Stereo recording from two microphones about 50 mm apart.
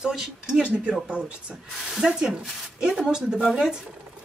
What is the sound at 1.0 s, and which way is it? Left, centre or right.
Speech, right.